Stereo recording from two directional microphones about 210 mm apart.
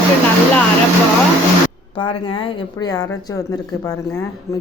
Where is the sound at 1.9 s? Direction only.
25° left (ahead or behind).